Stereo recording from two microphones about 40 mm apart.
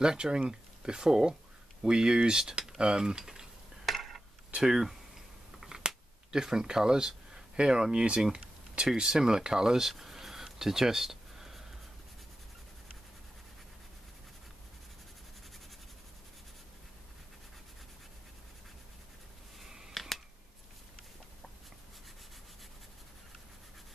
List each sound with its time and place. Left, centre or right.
0.0 s speech: right
3.8 s a sound: centre
4.6 s speech: centre
5.6 s a sound: centre
8.9 s speech: centre
19.9 s scissors: centre